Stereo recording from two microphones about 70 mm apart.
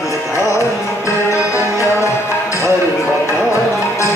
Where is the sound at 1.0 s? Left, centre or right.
Left.